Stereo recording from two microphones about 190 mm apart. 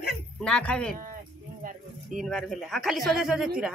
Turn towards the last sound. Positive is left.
turn(degrees=-5)  # may be behind; listen again after turning